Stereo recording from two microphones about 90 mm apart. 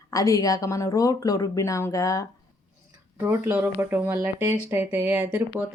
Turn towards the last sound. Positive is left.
turn(degrees=-20)  # may be behind; listen again after turning